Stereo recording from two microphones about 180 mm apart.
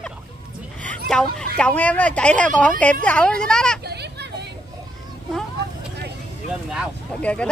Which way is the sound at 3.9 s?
65° right (ahead or behind).